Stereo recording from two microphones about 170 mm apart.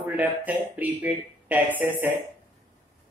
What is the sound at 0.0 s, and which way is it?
Speech, 10° right (ahead or behind).